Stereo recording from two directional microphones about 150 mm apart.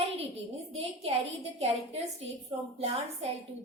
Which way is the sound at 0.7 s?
45° right (ahead or behind).